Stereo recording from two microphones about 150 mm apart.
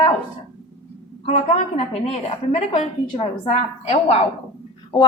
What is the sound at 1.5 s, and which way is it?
A woman's voice, 40° left (ahead or behind).